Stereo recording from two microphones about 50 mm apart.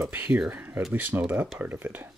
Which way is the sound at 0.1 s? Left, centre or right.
Right.